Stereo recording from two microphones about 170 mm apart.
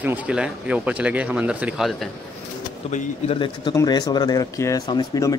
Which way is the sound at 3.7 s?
25° left (ahead or behind).